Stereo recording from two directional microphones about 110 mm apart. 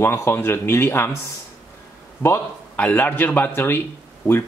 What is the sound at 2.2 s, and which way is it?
Speech, 20° left (ahead or behind).